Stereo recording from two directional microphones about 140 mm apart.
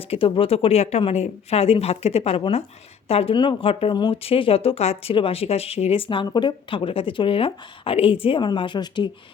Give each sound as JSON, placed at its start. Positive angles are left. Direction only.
{"t": 0.0, "sound": "a woman's voice", "side_deg": 40}